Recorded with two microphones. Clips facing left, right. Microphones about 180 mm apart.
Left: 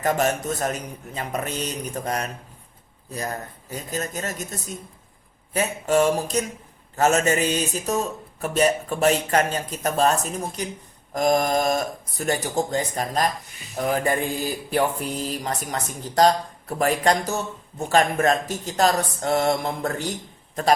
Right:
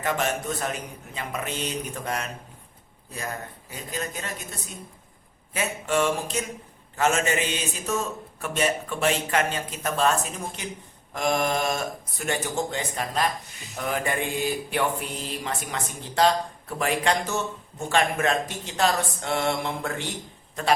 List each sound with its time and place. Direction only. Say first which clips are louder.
0.0 s mantra: left 4 dB; 40° left (ahead or behind)